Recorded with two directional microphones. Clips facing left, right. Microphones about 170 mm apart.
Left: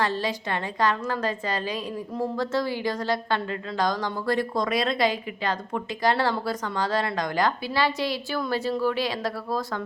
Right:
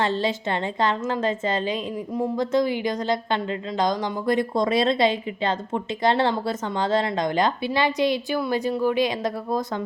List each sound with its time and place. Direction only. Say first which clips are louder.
0.0 s a woman's voice: right 3 dB; 25° right (ahead or behind)